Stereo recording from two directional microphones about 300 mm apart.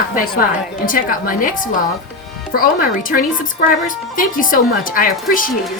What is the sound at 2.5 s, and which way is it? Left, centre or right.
A woman's voice, left.